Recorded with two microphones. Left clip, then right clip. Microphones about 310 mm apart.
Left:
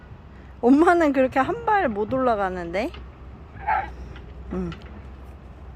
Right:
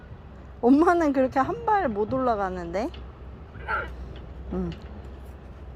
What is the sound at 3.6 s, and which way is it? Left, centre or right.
Vehicle, centre.